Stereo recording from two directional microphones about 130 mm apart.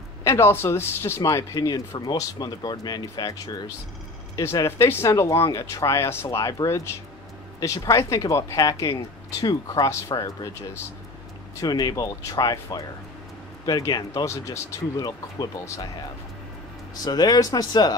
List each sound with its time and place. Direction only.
0.2 s speech: 20° left (ahead or behind)
17.0 s speech: 30° left (ahead or behind)